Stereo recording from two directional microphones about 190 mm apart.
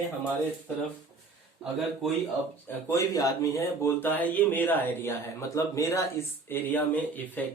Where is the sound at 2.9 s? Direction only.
20° left (ahead or behind).